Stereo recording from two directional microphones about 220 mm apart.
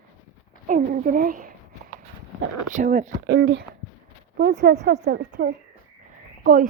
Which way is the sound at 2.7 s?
35° right (ahead or behind).